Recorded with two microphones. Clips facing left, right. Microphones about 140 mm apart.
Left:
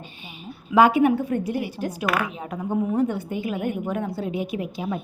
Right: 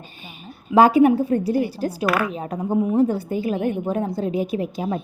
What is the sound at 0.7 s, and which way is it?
A woman's voice, 35° right (ahead or behind).